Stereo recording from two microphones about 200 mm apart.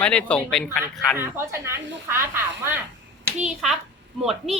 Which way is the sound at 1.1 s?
10° right (ahead or behind).